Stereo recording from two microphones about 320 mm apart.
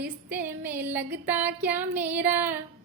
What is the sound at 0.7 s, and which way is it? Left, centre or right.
Female singing, centre.